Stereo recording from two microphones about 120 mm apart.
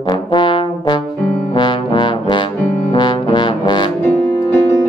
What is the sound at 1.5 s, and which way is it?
Trombone, 40° left (ahead or behind).